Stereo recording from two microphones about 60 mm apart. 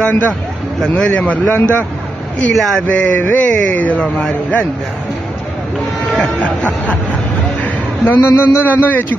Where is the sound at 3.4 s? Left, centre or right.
Left.